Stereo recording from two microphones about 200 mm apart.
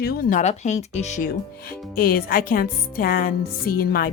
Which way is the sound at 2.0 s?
50° left (ahead or behind).